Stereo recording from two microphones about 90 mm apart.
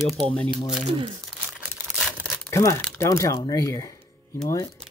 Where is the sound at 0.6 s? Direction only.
Centre (ahead or behind).